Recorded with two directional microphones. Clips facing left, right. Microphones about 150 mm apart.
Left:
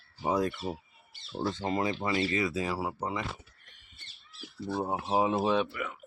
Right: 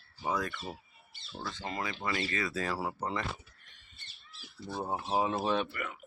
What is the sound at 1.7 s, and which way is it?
Speech, 25° left (ahead or behind).